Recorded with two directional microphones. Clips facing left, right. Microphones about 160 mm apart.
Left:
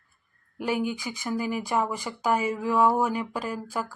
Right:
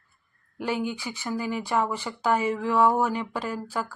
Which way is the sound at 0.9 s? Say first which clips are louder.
Left 1 dB; 15° left (ahead or behind).